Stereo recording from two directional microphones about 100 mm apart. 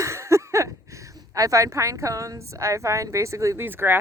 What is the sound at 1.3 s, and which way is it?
A woman's voice, 35° right (ahead or behind).